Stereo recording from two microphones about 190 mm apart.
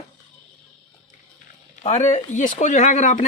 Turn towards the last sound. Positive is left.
turn(degrees=40)  # may be behind; listen again after turning